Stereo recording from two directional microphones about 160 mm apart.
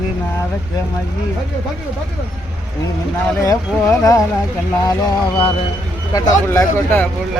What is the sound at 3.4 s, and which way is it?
Speech, 20° left (ahead or behind).